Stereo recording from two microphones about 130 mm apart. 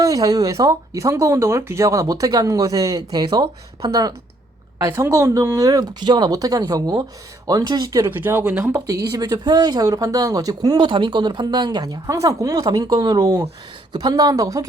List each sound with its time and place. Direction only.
0.0 s speech: 30° right (ahead or behind)
8.0 s speech: 15° right (ahead or behind)
9.1 s speech: 30° right (ahead or behind)